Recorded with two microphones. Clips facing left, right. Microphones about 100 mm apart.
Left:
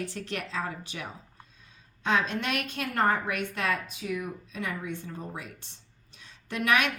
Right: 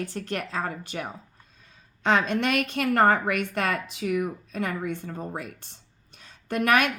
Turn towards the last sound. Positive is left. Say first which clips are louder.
# right 4 dB
turn(degrees=-50)  # may be behind; listen again after turning